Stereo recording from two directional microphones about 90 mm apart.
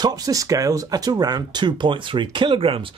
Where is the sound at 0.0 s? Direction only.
45° right (ahead or behind); by 2.9 s 80° right.